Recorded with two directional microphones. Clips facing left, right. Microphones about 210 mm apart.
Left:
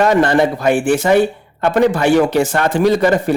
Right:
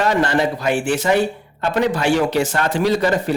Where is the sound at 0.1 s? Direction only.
50° left (ahead or behind).